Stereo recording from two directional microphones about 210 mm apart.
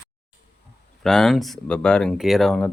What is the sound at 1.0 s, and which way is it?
Speech, centre (ahead or behind).